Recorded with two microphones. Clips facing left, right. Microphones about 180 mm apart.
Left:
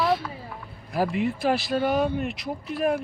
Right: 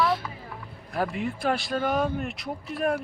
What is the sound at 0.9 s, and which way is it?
Speech, 5° left (ahead or behind).